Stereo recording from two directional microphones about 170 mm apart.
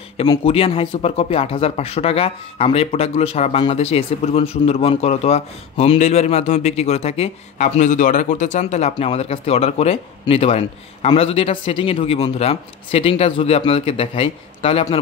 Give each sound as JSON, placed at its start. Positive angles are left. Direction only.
{"t": 0.3, "sound": "speech", "side_deg": 35}